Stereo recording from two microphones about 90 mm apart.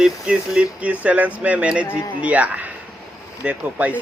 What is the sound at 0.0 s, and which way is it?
Speech, 10° right (ahead or behind).